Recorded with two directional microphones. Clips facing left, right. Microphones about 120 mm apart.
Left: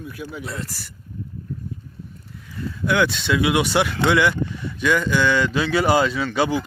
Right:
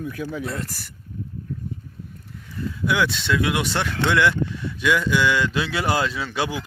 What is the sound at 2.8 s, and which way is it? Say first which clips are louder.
Speech: left 2 dB; centre (ahead or behind).